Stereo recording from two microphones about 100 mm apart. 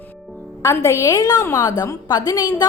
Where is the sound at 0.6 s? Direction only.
30° left (ahead or behind).